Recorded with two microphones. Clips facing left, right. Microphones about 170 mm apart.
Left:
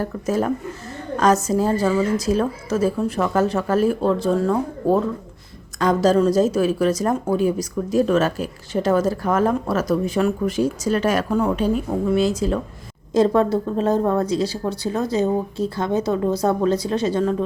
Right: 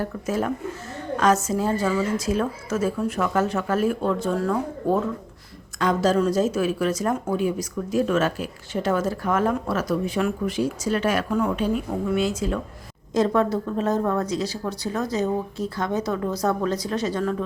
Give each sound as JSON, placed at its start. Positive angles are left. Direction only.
{"t": 0.0, "sound": "a woman's voice", "side_deg": 40}